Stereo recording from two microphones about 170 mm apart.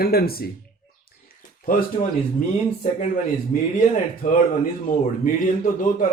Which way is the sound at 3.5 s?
50° left (ahead or behind).